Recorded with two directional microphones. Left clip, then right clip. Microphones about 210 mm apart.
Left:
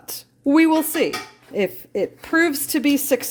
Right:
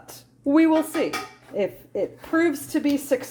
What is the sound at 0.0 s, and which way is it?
A woman's voice, 55° left (ahead or behind).